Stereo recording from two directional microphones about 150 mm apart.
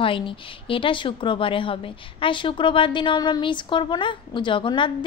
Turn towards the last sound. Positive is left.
turn(degrees=35)  # may be behind; listen again after turning